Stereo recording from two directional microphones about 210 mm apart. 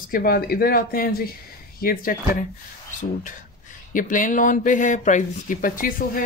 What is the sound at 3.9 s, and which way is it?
Speech, 40° left (ahead or behind).